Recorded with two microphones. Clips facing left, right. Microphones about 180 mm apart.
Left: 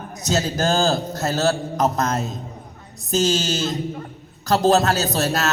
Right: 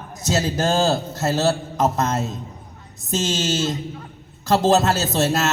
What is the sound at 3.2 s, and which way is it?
Speech, 25° right (ahead or behind).